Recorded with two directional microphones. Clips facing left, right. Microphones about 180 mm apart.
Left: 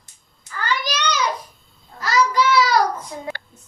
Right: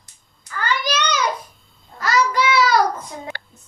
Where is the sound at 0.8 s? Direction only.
55° right (ahead or behind).